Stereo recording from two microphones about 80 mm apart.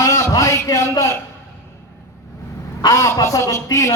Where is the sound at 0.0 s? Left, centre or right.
Left.